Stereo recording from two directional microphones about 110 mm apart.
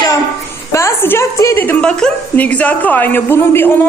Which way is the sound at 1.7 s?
10° left (ahead or behind).